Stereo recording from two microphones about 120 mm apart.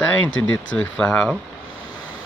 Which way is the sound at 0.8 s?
10° left (ahead or behind).